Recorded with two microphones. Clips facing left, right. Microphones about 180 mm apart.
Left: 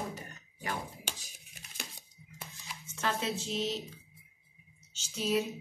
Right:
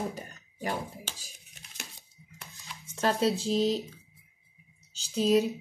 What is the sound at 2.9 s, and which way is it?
Speech, 35° right (ahead or behind).